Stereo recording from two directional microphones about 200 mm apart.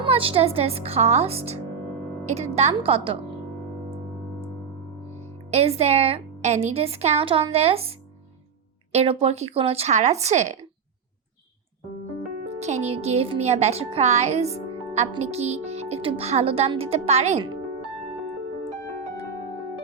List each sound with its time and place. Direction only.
0.0 s speech: 30° right (ahead or behind)
5.5 s speech: 30° right (ahead or behind)
12.5 s speech: 35° right (ahead or behind)